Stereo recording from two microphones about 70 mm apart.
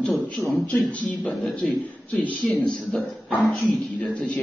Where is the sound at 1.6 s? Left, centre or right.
Left.